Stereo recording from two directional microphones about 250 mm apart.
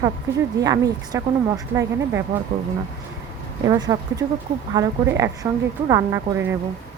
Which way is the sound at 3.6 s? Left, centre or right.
Centre.